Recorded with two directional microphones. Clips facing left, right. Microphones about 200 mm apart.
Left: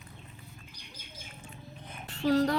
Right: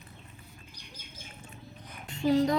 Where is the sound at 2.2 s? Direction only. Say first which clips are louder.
Right 1 dB; 15° right (ahead or behind).